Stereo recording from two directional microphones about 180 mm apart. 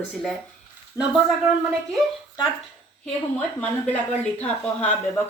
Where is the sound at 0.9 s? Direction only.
15° left (ahead or behind).